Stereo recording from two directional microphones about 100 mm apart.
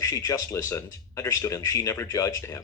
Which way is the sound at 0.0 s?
35° left (ahead or behind).